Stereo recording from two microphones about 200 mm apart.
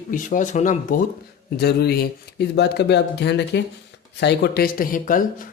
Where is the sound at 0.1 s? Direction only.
40° left (ahead or behind).